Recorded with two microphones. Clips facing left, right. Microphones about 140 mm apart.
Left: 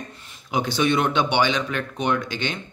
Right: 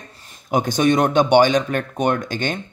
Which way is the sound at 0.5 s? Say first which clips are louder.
Right 4 dB; 45° right (ahead or behind).